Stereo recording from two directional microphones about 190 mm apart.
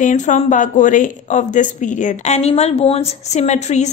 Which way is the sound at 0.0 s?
40° left (ahead or behind).